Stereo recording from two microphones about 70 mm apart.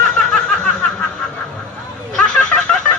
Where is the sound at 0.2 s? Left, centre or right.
Centre.